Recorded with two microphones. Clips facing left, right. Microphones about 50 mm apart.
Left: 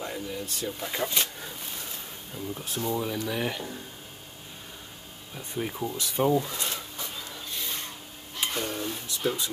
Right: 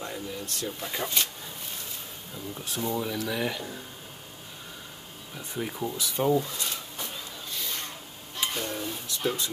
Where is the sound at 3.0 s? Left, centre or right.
Centre.